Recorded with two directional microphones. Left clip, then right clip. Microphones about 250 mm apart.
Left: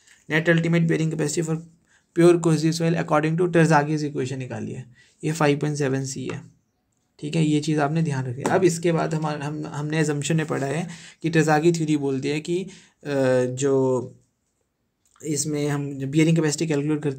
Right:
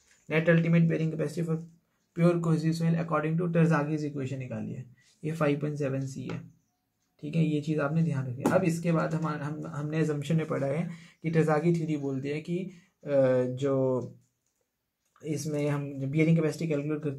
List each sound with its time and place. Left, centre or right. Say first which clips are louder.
0.3 s a man's voice: left 5 dB; left
15.1 s speech: left 6 dB; left